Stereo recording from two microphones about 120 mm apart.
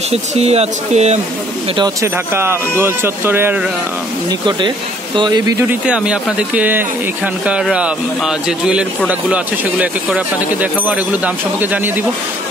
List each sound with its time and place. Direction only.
0.1 s speech: 60° right (ahead or behind)
2.0 s speech: 20° right (ahead or behind)
4.5 s speech: 40° right (ahead or behind)
5.9 s speech: 10° right (ahead or behind)